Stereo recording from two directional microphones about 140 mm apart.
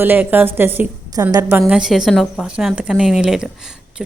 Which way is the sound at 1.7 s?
Centre (ahead or behind).